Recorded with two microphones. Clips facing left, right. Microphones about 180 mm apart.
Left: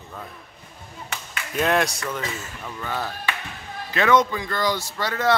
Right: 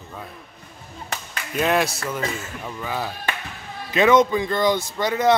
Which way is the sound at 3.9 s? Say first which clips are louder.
Right 3 dB; 20° right (ahead or behind).